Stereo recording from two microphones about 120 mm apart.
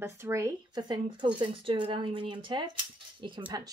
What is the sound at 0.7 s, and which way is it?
Speech, 40° right (ahead or behind).